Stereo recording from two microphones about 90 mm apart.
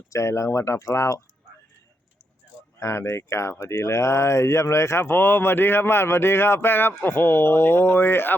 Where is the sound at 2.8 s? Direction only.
30° left (ahead or behind).